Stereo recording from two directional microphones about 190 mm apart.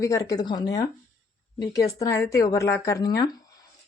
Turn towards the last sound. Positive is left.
turn(degrees=20)  # may be behind; listen again after turning